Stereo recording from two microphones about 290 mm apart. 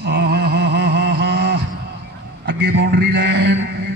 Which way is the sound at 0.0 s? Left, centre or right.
Right.